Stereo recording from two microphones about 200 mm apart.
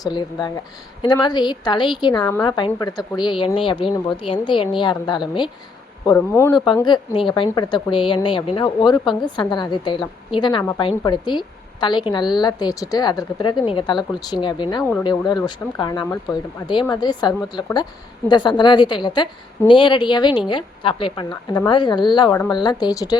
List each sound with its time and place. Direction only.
0.0 s a woman's voice: 20° left (ahead or behind)